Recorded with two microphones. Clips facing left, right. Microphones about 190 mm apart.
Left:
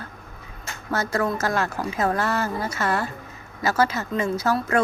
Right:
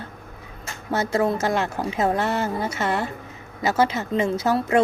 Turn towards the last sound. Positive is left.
turn(degrees=-20)  # may be behind; listen again after turning